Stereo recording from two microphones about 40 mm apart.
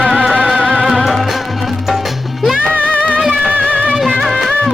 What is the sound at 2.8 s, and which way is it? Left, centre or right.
Music, left.